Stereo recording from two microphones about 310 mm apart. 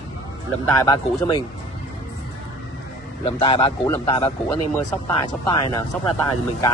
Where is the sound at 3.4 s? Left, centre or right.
Centre.